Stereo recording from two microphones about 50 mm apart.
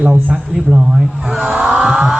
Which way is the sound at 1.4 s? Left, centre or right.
Right.